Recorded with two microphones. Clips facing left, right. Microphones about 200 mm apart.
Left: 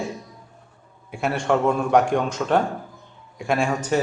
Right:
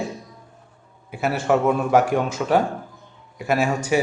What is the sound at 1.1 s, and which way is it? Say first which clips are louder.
A man's voice: right 1 dB; 5° right (ahead or behind).